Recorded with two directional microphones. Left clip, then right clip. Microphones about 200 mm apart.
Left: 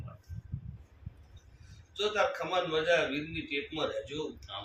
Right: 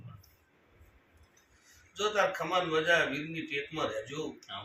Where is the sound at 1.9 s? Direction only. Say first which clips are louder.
Right 1 dB; 10° left (ahead or behind).